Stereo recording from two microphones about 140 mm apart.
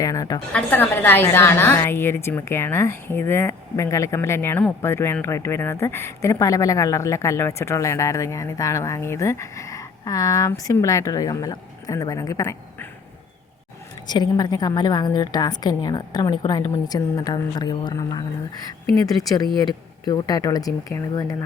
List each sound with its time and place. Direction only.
0.0 s a woman's voice: 25° left (ahead or behind)
0.5 s a woman's voice: 15° left (ahead or behind)
14.1 s a woman's voice: 30° left (ahead or behind)